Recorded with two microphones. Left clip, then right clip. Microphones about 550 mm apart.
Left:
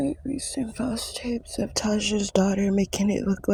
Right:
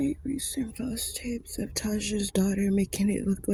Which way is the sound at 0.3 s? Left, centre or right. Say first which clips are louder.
Left 4 dB; right.